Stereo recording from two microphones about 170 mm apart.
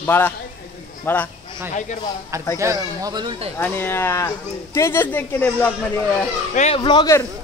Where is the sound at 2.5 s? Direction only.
20° right (ahead or behind).